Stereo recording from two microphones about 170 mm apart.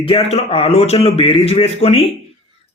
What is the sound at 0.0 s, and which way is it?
Speech, 35° left (ahead or behind).